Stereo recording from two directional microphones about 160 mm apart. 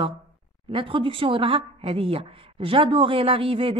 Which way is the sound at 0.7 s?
35° right (ahead or behind).